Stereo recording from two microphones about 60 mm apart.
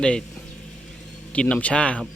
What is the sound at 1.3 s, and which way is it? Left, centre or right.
Speech, centre.